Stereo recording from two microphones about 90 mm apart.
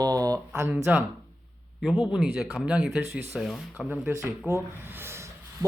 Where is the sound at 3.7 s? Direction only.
15° right (ahead or behind).